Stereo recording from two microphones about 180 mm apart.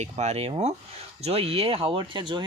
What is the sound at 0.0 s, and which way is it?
Speech, 40° right (ahead or behind).